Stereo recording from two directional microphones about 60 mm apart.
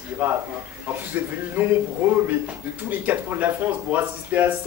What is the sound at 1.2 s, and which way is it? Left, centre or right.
Speech, right.